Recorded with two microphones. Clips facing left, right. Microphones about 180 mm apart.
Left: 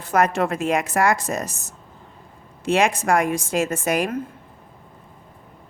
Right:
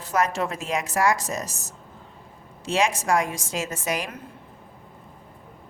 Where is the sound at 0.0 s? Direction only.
60° left (ahead or behind).